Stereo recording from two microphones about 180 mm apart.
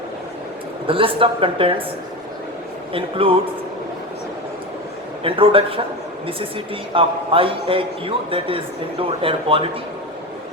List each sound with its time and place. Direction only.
0.9 s a man's voice: 30° right (ahead or behind)
2.9 s a man's voice: 30° right (ahead or behind)
5.2 s a man's voice: 30° right (ahead or behind)
6.9 s a man's voice: 30° right (ahead or behind)